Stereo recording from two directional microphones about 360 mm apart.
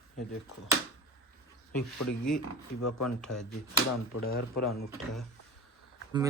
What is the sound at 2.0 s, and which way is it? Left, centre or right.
Speech, left.